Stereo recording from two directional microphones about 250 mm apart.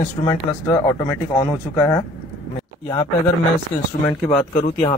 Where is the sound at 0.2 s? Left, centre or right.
Centre.